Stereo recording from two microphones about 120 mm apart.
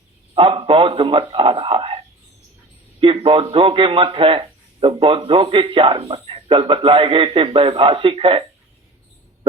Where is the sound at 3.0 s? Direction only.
50° right (ahead or behind).